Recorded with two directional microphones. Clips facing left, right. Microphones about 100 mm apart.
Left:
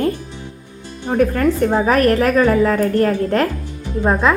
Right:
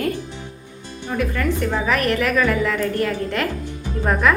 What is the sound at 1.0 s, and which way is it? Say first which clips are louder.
A woman's voice: left 7 dB; 45° left (ahead or behind).